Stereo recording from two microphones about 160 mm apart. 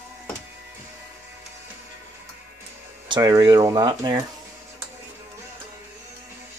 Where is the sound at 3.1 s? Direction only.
20° right (ahead or behind).